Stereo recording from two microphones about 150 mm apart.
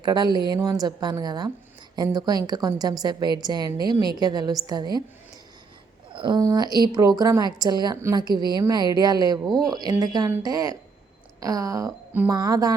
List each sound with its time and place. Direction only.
0.0 s a woman's voice: 30° right (ahead or behind)
6.1 s a woman's voice: 30° right (ahead or behind)